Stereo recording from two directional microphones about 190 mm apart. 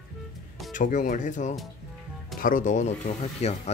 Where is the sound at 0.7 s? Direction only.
45° left (ahead or behind).